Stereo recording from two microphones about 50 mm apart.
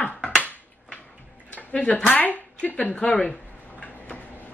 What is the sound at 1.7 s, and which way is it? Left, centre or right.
Speech, left.